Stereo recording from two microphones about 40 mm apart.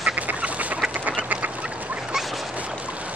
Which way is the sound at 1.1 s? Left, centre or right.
Right.